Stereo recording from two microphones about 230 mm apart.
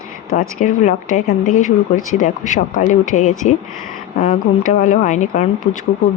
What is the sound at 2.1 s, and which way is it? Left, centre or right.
Speech, left.